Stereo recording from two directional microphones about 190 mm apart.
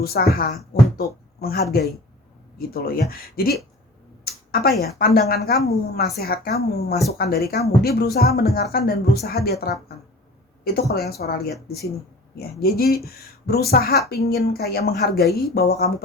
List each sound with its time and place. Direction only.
0.0 s speech: 55° left (ahead or behind)
4.2 s a sound: 50° left (ahead or behind)
4.8 s speech: 55° left (ahead or behind)